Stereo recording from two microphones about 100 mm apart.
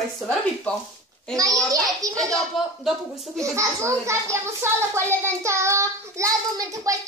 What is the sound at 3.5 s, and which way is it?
A child's voice, 30° right (ahead or behind).